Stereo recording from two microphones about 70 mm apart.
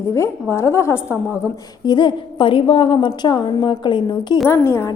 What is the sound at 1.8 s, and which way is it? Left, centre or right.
A woman's voice, left.